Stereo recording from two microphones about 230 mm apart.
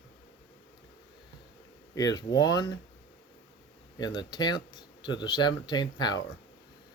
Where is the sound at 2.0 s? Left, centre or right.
Centre.